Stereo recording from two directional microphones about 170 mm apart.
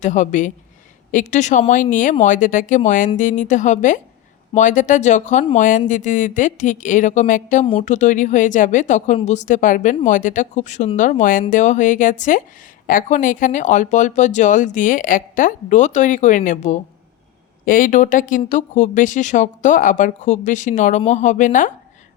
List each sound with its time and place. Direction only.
0.0 s speech: 45° left (ahead or behind)
7.6 s speech: 35° left (ahead or behind)